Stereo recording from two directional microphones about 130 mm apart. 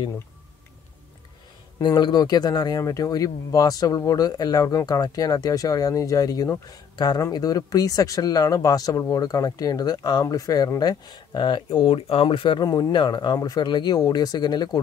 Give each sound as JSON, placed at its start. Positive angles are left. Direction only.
{"t": 1.8, "sound": "speech", "side_deg": 35}
{"t": 12.6, "sound": "speech", "side_deg": 30}